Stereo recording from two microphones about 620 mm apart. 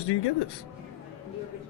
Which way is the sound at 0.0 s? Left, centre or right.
Left.